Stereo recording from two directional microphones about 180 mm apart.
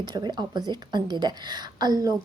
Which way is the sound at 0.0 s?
25° right (ahead or behind).